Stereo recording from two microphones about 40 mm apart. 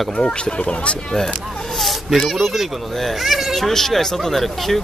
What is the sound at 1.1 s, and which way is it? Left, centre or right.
Speech, centre.